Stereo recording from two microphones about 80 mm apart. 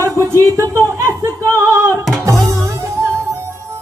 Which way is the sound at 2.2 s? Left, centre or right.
Right.